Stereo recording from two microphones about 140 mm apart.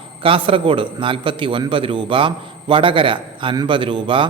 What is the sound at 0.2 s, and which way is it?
A man's voice, 40° right (ahead or behind).